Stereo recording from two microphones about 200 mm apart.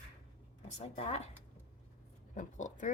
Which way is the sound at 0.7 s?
35° left (ahead or behind).